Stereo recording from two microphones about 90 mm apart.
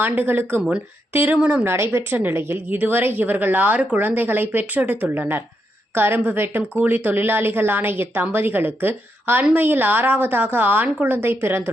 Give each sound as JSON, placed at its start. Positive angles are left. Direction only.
{"t": 0.0, "sound": "a woman's voice", "side_deg": -20}
{"t": 1.6, "sound": "a woman's voice", "side_deg": -30}